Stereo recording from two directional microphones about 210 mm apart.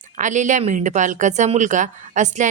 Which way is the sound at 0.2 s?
35° right (ahead or behind).